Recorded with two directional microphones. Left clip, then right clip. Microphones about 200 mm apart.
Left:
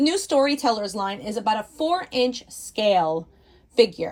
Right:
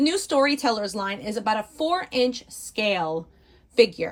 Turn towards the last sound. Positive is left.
turn(degrees=0)  # may be behind; listen again after turning